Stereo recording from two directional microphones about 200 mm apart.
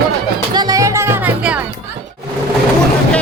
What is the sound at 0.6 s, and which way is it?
Speech, 20° right (ahead or behind).